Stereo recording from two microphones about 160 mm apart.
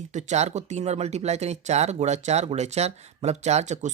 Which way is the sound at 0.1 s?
45° right (ahead or behind).